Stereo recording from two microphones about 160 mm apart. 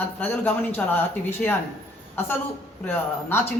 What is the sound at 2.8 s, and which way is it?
Speech, 15° left (ahead or behind).